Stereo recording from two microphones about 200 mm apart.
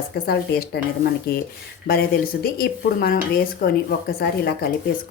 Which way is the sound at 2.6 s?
50° left (ahead or behind).